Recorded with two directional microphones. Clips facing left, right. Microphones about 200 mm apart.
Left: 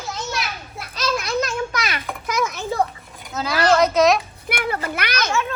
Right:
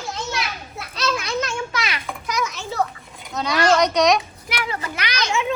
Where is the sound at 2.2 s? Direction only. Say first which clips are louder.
Left 3 dB; 50° left (ahead or behind).